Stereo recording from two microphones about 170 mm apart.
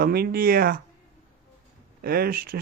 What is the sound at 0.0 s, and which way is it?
Speech, 65° right (ahead or behind).